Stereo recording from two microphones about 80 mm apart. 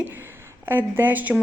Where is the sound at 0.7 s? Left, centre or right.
Right.